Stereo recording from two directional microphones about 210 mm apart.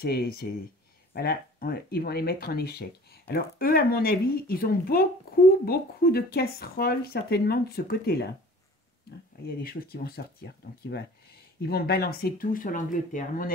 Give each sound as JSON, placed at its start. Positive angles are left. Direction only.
{"t": 0.0, "sound": "speech", "side_deg": 50}
{"t": 9.6, "sound": "speech", "side_deg": 45}